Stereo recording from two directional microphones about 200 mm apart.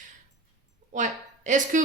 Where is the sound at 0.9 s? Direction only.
40° right (ahead or behind).